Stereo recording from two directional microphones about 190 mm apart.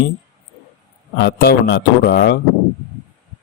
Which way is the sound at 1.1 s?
60° left (ahead or behind).